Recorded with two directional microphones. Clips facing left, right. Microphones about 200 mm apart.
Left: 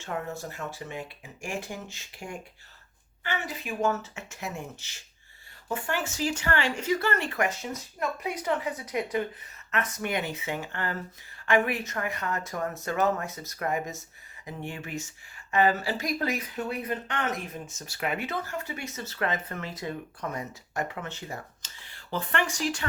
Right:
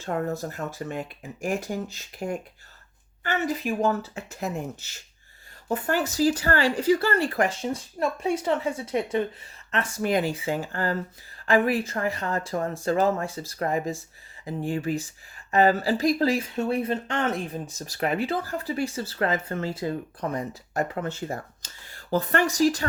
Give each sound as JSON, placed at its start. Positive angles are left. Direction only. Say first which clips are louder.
{"t": 0.0, "sound": "speech", "louder": "right 6 dB", "side_deg": -40}